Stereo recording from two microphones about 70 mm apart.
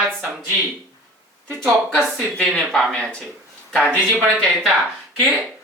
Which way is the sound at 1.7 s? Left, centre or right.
Centre.